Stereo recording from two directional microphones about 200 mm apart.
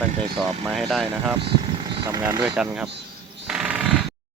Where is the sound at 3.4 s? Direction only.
5° right (ahead or behind).